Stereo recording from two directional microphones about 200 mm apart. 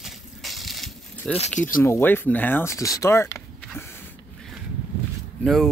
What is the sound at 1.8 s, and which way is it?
Speech, 10° left (ahead or behind).